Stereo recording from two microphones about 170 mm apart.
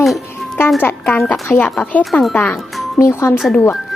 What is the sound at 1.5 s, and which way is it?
Speech, 10° left (ahead or behind).